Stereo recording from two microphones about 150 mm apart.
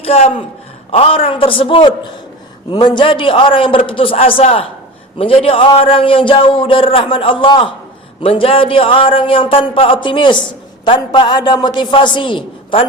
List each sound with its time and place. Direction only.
0.0 s a man's voice: 40° left (ahead or behind)